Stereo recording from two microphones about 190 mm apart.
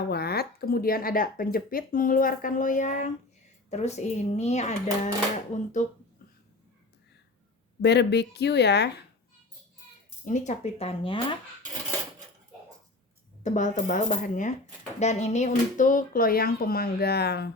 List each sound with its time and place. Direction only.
0.1 s speech: 55° left (ahead or behind); by 5.9 s 40° left (ahead or behind)
7.8 s speech: 60° left (ahead or behind)
10.2 s speech: 40° left (ahead or behind)
13.4 s speech: 40° left (ahead or behind); by 17.5 s 60° left (ahead or behind)